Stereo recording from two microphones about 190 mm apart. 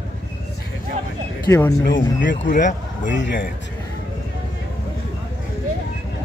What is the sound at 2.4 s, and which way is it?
Speech, 40° left (ahead or behind).